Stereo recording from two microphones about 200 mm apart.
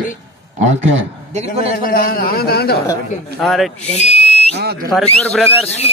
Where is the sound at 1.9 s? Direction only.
45° left (ahead or behind).